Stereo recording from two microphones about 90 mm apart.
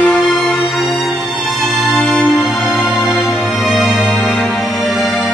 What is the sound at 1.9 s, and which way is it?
Music, 10° left (ahead or behind).